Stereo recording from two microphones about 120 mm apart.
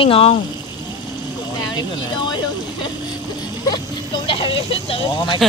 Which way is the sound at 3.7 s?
40° left (ahead or behind).